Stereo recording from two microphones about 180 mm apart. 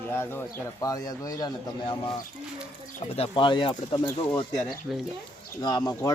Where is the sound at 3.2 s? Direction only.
25° left (ahead or behind).